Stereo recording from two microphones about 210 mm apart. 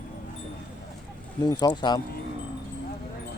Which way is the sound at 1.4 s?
20° left (ahead or behind).